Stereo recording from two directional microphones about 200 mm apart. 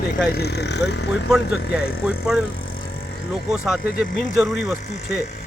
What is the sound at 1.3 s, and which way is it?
Speech, 5° right (ahead or behind).